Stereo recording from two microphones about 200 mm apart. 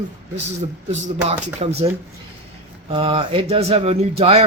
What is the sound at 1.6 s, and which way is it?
Speech, 30° right (ahead or behind).